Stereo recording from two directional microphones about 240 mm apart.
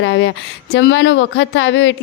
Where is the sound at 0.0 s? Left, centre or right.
Left.